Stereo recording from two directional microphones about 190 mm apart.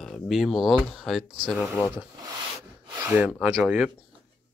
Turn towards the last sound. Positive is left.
turn(degrees=-5)  # may be behind; listen again after turning